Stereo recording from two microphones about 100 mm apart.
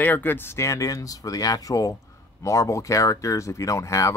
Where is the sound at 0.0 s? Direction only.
20° left (ahead or behind).